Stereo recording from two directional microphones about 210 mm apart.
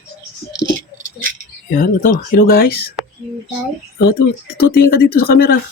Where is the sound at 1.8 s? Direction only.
40° left (ahead or behind).